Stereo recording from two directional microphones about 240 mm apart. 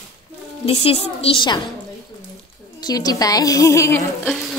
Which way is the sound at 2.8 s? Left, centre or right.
Centre.